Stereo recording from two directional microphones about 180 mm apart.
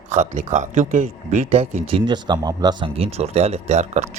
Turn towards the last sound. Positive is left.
turn(degrees=-40)  # may be behind; listen again after turning